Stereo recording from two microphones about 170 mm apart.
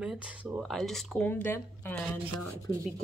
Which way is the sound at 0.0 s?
5° right (ahead or behind).